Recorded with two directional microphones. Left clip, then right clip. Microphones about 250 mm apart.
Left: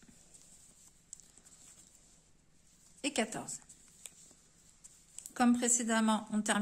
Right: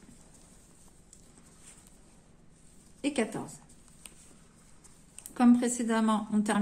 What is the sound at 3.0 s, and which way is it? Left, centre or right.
Speech, left.